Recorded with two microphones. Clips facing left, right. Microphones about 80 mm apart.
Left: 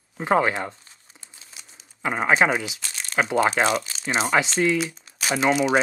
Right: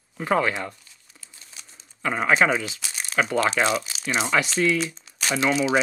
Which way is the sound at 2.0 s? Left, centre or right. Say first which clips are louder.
Even; centre.